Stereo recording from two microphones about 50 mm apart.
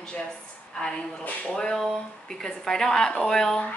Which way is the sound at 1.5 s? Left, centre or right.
Centre.